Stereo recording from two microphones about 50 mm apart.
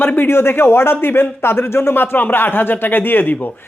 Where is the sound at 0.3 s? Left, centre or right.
Left.